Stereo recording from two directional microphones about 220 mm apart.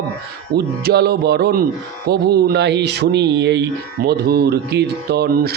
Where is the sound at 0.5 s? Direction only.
45° right (ahead or behind).